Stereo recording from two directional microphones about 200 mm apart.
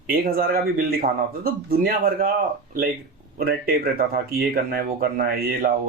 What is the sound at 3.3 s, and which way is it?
Speech, 50° right (ahead or behind).